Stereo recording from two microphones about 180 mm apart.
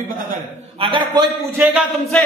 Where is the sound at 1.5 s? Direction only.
10° right (ahead or behind).